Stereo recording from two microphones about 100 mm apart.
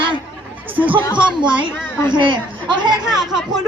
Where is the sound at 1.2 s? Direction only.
55° right (ahead or behind).